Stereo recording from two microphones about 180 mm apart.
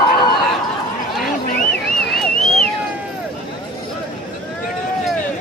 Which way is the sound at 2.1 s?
Centre (ahead or behind).